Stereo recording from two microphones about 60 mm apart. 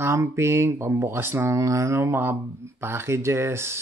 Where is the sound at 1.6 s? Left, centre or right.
Right.